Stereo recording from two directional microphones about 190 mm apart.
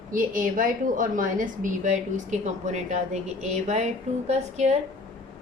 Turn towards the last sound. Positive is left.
turn(degrees=-35)  # may be behind; listen again after turning